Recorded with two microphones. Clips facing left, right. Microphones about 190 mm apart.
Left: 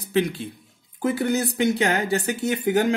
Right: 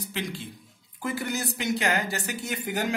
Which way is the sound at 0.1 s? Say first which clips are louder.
Left 13 dB; 60° left (ahead or behind).